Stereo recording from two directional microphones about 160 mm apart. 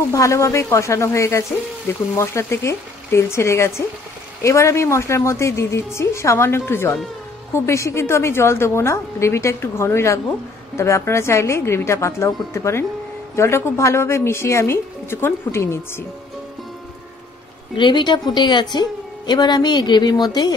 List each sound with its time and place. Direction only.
0.1 s a woman's voice: 20° left (ahead or behind)
17.7 s a woman's voice: 30° left (ahead or behind)